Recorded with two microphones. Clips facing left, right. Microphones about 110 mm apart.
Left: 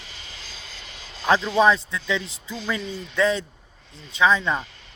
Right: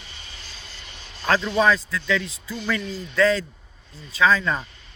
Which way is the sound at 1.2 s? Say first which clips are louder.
Left 2 dB; 15° left (ahead or behind).